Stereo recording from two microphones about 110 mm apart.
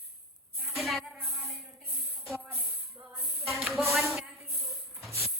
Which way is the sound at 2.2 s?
Centre (ahead or behind).